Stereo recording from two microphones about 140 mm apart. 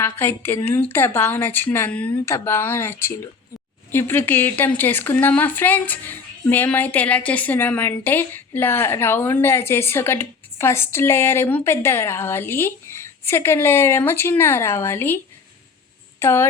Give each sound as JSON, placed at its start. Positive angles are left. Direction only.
{"t": 0.0, "sound": "a woman's voice", "side_deg": 15}
{"t": 16.2, "sound": "a woman's voice", "side_deg": 20}